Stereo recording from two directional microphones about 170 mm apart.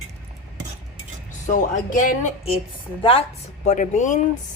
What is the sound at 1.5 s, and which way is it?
Speech, 50° left (ahead or behind).